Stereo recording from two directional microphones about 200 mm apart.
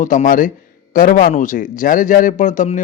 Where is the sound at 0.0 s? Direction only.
40° left (ahead or behind).